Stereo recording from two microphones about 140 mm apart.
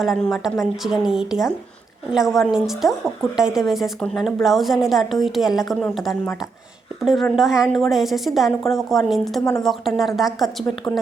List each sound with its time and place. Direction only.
0.0 s a woman's voice: centre (ahead or behind)
9.4 s speech: 20° left (ahead or behind)
9.6 s a woman's voice: centre (ahead or behind)